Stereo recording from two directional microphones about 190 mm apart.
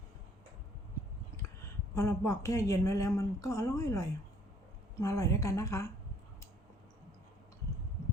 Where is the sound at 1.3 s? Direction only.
15° left (ahead or behind).